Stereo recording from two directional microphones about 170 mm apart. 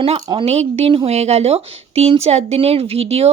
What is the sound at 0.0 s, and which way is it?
Speech, 30° right (ahead or behind).